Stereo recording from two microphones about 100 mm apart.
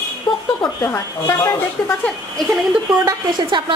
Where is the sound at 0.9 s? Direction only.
25° left (ahead or behind).